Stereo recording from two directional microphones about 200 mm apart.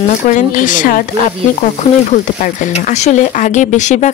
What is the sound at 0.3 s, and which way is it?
Speech, 40° left (ahead or behind).